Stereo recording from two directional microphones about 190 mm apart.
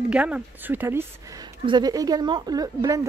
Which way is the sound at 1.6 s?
20° right (ahead or behind).